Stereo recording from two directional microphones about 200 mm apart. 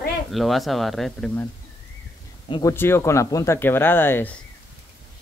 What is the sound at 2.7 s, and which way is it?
Speech, 10° left (ahead or behind).